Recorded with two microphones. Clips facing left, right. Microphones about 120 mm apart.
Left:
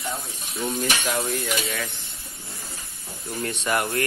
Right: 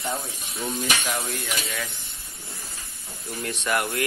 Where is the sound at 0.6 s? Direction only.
Centre (ahead or behind).